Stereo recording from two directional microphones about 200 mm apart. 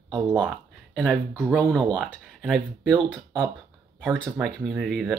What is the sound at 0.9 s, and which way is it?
Speech, centre (ahead or behind).